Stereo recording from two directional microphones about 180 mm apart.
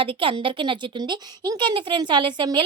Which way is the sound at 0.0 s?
30° right (ahead or behind).